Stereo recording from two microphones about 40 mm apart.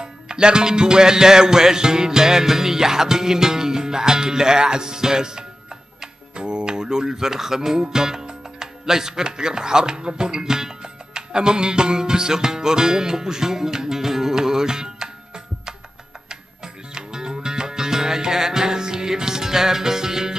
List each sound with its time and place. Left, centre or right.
0.0 s music: centre
6.3 s speech: right
16.3 s music: centre